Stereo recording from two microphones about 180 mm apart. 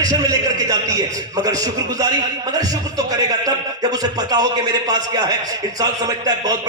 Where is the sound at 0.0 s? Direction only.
20° right (ahead or behind).